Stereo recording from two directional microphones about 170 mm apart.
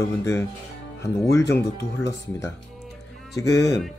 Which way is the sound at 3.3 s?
20° left (ahead or behind).